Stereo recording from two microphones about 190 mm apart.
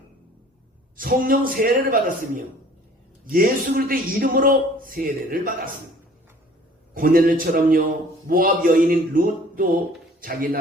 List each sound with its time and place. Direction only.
0.9 s a man's voice: 50° right (ahead or behind)
6.9 s a man's voice: 45° right (ahead or behind)